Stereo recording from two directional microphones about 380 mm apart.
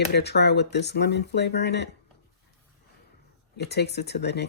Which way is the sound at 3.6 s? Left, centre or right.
Left.